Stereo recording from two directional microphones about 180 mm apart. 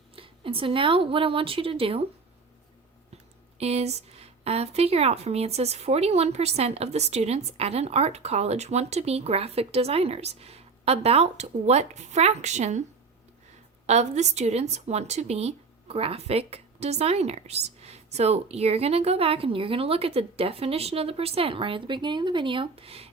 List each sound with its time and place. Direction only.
0.2 s a woman's voice: 30° right (ahead or behind)
3.6 s a woman's voice: 35° right (ahead or behind)
13.8 s a woman's voice: 40° right (ahead or behind)